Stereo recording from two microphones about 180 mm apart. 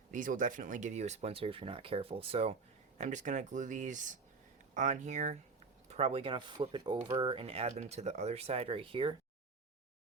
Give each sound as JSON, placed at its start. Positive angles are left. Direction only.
{"t": 0.1, "sound": "speech", "side_deg": -45}